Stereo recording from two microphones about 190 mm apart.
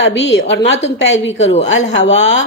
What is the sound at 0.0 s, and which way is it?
A woman's voice, 70° left (ahead or behind).